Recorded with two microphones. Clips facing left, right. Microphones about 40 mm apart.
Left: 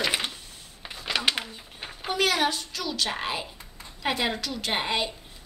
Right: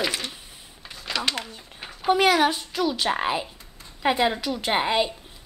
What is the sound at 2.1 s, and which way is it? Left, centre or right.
A woman's voice, right.